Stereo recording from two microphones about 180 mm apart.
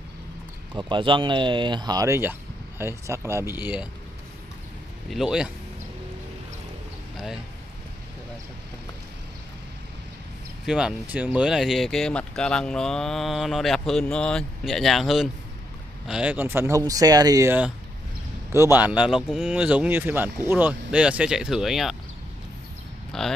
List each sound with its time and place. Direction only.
0.7 s speech: 25° right (ahead or behind); by 3.9 s 10° right (ahead or behind)
5.1 s speech: 5° right (ahead or behind)
10.6 s speech: 5° right (ahead or behind)
23.1 s speech: 5° left (ahead or behind)